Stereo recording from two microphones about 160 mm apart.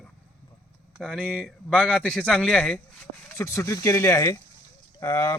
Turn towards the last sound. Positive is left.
turn(degrees=20)  # may be behind; listen again after turning